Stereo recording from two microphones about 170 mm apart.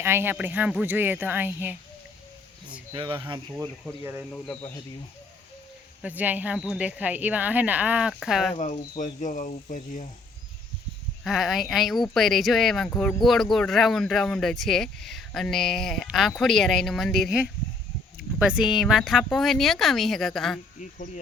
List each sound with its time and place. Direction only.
0.0 s speech: 15° right (ahead or behind)
2.9 s speech: 30° right (ahead or behind)
4.0 s speech: 10° right (ahead or behind)
4.3 s speech: 5° left (ahead or behind)
6.0 s speech: 10° right (ahead or behind)
8.5 s speech: 45° left (ahead or behind)
11.2 s speech: centre (ahead or behind)